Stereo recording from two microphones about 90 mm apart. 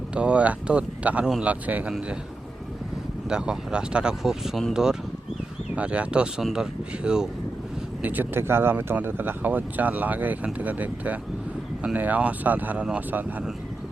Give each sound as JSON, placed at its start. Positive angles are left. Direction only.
{"t": 0.1, "sound": "speech", "side_deg": -10}
{"t": 3.2, "sound": "speech", "side_deg": -10}
{"t": 8.0, "sound": "speech", "side_deg": -20}